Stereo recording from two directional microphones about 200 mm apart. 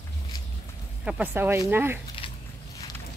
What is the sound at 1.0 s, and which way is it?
Speech, 5° right (ahead or behind).